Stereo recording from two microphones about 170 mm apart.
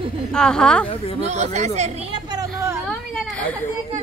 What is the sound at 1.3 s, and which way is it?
Speech, 40° right (ahead or behind).